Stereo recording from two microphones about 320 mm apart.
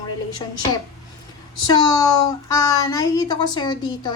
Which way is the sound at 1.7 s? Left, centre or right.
Centre.